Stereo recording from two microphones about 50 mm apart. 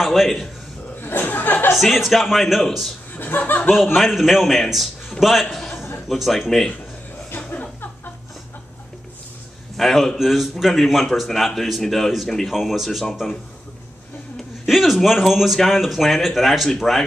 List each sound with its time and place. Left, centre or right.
0.0 s speech: centre
1.0 s a sound: left
1.8 s speech: centre
3.2 s speech: left
3.7 s a man's voice: centre
7.4 s a sound: left
9.8 s speech: centre
14.3 s speech: centre